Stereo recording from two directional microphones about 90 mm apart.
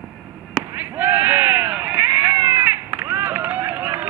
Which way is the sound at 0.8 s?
20° right (ahead or behind).